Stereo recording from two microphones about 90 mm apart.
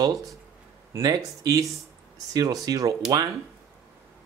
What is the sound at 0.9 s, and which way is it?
Speech, 40° right (ahead or behind).